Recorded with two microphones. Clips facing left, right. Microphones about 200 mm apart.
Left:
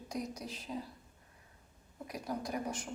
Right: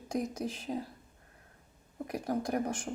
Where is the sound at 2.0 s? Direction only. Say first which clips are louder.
Right 6 dB; 55° right (ahead or behind).